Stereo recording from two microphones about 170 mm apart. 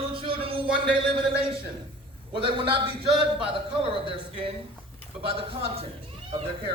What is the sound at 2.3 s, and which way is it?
A man's voice, 30° right (ahead or behind).